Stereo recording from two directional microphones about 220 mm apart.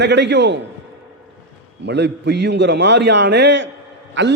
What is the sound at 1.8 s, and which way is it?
A man's voice, 50° right (ahead or behind).